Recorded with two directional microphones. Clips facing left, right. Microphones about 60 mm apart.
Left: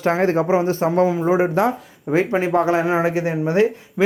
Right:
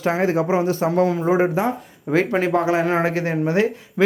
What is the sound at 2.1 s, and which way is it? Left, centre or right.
Speech, left.